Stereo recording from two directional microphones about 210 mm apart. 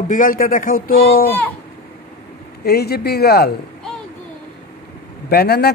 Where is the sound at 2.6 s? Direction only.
50° left (ahead or behind).